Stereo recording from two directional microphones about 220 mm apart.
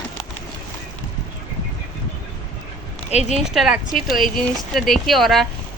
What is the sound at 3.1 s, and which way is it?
Speech, 30° left (ahead or behind).